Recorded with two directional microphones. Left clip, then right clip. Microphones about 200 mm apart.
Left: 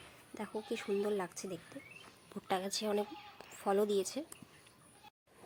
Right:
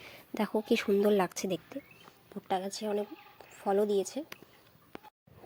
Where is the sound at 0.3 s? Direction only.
40° right (ahead or behind).